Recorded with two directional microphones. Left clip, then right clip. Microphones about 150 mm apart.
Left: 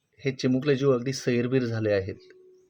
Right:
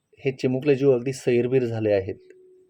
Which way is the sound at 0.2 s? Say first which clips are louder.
Right 2 dB; 25° right (ahead or behind).